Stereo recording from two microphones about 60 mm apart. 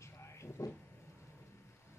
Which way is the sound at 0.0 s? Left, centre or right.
Left.